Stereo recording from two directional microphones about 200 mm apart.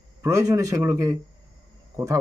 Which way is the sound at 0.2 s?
15° right (ahead or behind).